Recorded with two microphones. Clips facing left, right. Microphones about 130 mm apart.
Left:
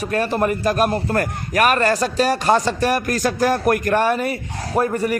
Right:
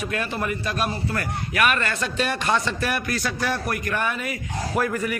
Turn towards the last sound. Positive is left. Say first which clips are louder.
# left 5 dB
turn(degrees=30)  # may be behind; listen again after turning